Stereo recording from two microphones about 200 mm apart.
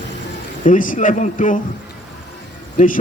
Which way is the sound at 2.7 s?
40° left (ahead or behind).